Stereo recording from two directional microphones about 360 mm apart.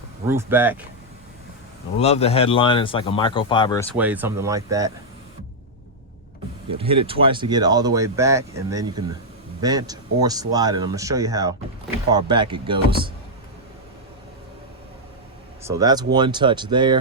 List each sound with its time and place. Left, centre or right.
0.3 s speech: centre
2.0 s speech: centre
3.9 s speech: centre
6.7 s speech: centre
15.6 s speech: centre